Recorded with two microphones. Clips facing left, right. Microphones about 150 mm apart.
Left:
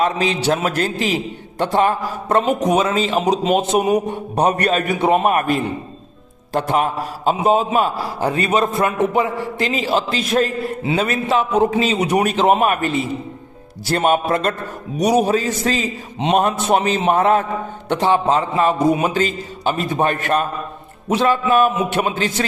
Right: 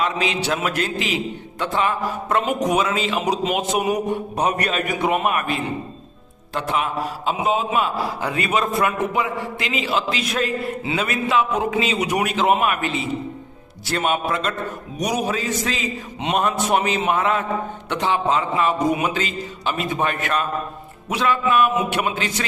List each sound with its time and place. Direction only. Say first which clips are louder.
0.0 s a man's voice: left 4 dB; 35° left (ahead or behind)
2.5 s a man's voice: left 3 dB; 30° left (ahead or behind)
14.9 s a man's voice: left 8 dB; 30° left (ahead or behind)